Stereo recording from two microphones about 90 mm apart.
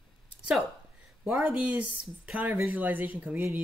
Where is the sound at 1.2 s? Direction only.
20° right (ahead or behind).